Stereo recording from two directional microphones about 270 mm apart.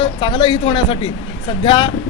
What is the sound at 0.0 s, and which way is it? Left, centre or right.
Speech, centre.